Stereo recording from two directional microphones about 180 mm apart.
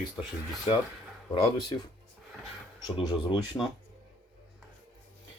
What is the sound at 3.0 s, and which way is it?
Speech, 25° left (ahead or behind).